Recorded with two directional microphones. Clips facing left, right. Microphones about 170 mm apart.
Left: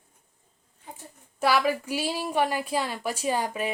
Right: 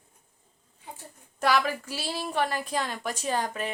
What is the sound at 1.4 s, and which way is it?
Speech, 5° left (ahead or behind).